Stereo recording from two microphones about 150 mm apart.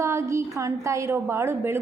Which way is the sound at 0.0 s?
20° right (ahead or behind).